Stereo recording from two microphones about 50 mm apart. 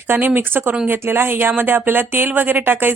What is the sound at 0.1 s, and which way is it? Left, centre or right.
A woman's voice, right.